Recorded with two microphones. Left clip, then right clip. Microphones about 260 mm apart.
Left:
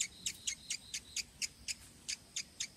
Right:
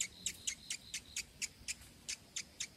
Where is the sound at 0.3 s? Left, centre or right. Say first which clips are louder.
Left 2 dB; centre.